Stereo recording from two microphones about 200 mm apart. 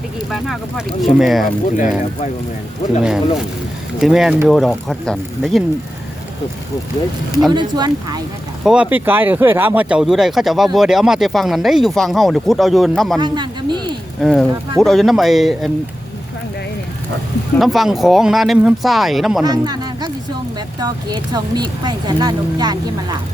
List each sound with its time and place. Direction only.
0.3 s speech: centre (ahead or behind)
3.0 s speech: 5° right (ahead or behind)
7.5 s speech: 20° right (ahead or behind)
8.6 s speech: 5° right (ahead or behind)
13.1 s speech: 20° right (ahead or behind)
14.2 s speech: centre (ahead or behind)
17.6 s speech: centre (ahead or behind)
19.4 s speech: 20° right (ahead or behind)